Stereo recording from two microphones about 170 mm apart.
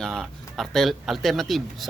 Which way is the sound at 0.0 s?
Centre (ahead or behind).